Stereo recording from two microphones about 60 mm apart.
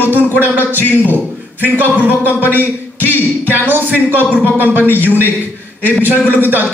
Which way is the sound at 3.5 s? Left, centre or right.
Right.